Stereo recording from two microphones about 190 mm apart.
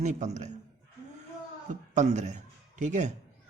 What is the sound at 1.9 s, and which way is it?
A man's voice, 40° right (ahead or behind).